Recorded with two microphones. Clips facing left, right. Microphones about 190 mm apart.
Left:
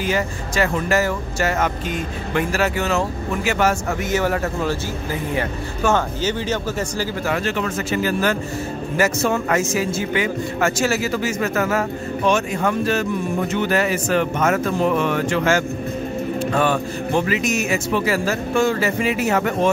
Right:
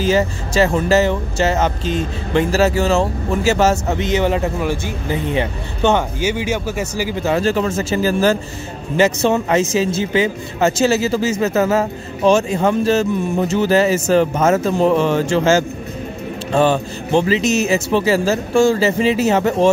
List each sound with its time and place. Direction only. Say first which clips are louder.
0.0 s speech: right 6 dB; 30° right (ahead or behind); by 7.1 s 10° right (ahead or behind)
7.2 s speech: right 7 dB; 30° right (ahead or behind)